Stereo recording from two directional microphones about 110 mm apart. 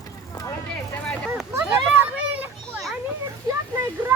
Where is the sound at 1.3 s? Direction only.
20° right (ahead or behind).